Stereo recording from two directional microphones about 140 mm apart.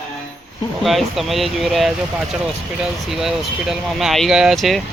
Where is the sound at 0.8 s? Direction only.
Centre (ahead or behind).